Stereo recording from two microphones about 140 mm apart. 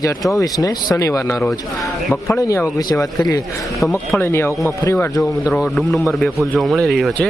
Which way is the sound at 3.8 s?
Centre (ahead or behind).